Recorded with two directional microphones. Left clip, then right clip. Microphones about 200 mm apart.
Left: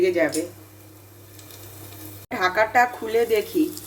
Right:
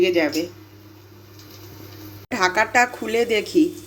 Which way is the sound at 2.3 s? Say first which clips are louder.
Right 1 dB; 20° right (ahead or behind).